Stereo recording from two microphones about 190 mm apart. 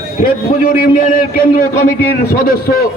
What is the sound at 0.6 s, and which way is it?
A man's voice, 45° left (ahead or behind).